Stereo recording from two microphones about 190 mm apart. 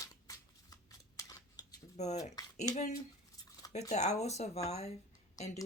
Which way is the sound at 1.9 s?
35° left (ahead or behind).